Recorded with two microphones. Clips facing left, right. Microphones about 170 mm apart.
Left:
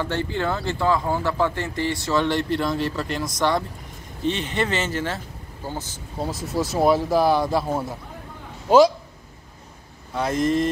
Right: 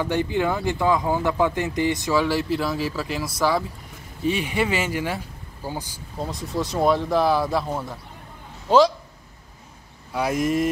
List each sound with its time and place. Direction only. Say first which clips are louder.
0.0 s speech: right 2 dB; 15° right (ahead or behind)
6.1 s speech: left 2 dB; 5° left (ahead or behind)
7.6 s a man's voice: left 3 dB; 10° left (ahead or behind)
10.1 s speech: left 1 dB; 10° right (ahead or behind)